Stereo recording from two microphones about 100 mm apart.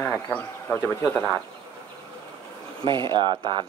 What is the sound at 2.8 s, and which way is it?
Speech, 50° right (ahead or behind).